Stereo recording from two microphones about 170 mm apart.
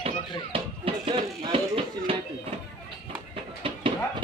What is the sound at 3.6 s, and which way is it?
Clip-clop, 30° right (ahead or behind).